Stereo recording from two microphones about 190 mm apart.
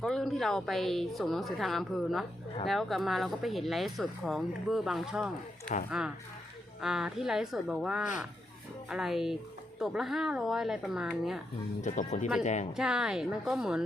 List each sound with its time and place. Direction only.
0.0 s speech: centre (ahead or behind)
5.7 s speech: 40° left (ahead or behind)
6.8 s speech: 5° right (ahead or behind)
11.8 s speech: 40° left (ahead or behind)
12.7 s speech: 5° right (ahead or behind)